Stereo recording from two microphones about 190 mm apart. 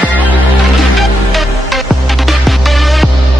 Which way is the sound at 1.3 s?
Centre (ahead or behind).